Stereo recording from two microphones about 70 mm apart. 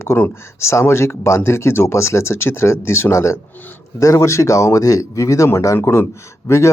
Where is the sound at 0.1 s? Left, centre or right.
Left.